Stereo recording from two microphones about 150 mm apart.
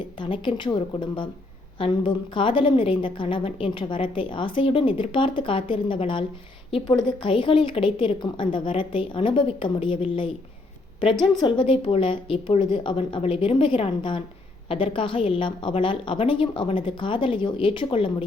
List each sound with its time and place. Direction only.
0.2 s a woman's voice: 35° left (ahead or behind)
11.3 s a woman's voice: 35° left (ahead or behind)